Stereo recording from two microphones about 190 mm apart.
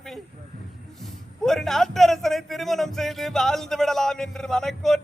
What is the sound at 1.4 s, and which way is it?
Speech, centre (ahead or behind).